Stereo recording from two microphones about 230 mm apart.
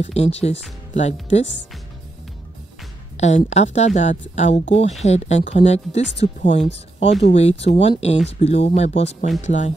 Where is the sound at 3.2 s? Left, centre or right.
Left.